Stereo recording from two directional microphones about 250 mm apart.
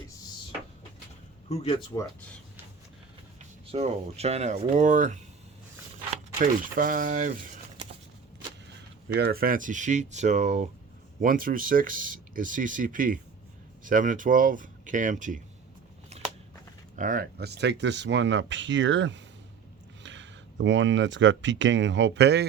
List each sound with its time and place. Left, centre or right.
1.5 s speech: left
3.7 s speech: right
6.4 s speech: right
9.1 s speech: right
17.0 s speech: right